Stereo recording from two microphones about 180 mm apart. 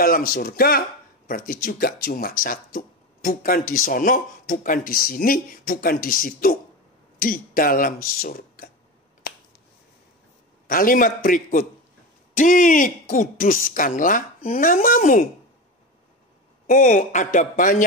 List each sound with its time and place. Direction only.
0.0 s speech: 55° left (ahead or behind)
10.7 s speech: 50° left (ahead or behind)
16.6 s speech: 50° left (ahead or behind)